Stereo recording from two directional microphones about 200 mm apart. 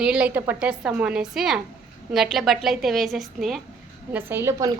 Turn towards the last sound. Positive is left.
turn(degrees=-15)  # may be behind; listen again after turning